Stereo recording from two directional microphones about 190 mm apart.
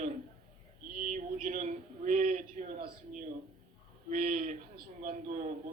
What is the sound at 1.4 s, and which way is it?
A man's voice, 40° right (ahead or behind).